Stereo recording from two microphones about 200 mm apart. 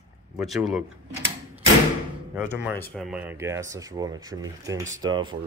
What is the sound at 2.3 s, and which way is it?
Speech, 5° right (ahead or behind).